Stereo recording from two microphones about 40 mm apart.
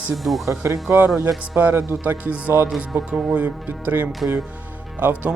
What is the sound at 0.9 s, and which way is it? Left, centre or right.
Speech, right.